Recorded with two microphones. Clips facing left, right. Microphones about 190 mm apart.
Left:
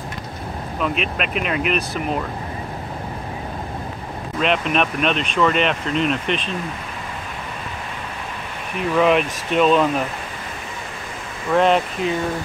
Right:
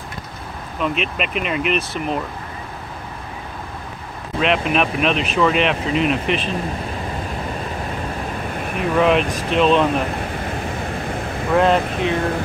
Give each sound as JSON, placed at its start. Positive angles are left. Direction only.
{"t": 0.7, "sound": "speech", "side_deg": 0}
{"t": 4.4, "sound": "speech", "side_deg": 0}
{"t": 8.9, "sound": "speech", "side_deg": 0}
{"t": 11.5, "sound": "speech", "side_deg": 0}